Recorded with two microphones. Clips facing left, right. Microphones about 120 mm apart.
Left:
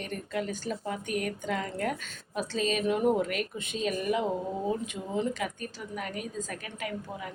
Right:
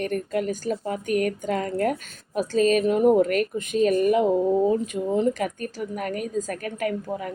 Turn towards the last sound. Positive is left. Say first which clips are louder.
# right 9 dB
turn(degrees=-45)  # may be behind; listen again after turning